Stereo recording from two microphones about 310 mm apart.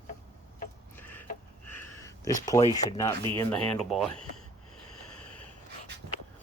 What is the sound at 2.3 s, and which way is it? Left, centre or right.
Speech, centre.